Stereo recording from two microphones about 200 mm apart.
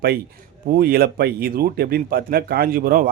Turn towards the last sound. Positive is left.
turn(degrees=-45)  # may be behind; listen again after turning